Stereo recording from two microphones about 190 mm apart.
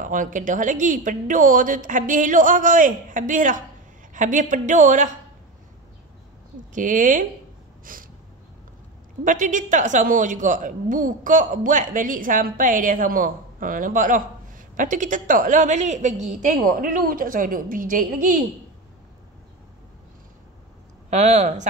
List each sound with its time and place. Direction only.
0.0 s a woman's voice: 45° right (ahead or behind)
6.7 s a woman's voice: 45° right (ahead or behind)
7.8 s snort: 45° right (ahead or behind)
9.2 s a woman's voice: 40° right (ahead or behind)
21.1 s speech: 35° right (ahead or behind)